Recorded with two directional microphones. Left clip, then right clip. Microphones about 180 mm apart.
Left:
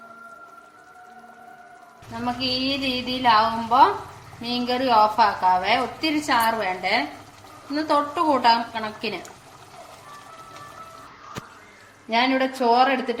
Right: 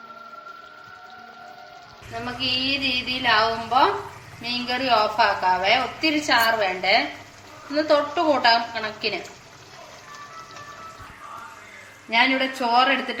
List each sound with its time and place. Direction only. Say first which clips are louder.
2.4 s music: right 3 dB; 65° left (ahead or behind)
4.4 s a woman's voice: even; 70° left (ahead or behind)
7.7 s a woman's voice: right 2 dB; 70° left (ahead or behind)
12.1 s music: right 1 dB; 65° left (ahead or behind)